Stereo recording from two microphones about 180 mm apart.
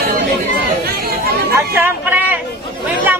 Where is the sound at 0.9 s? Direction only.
60° right (ahead or behind).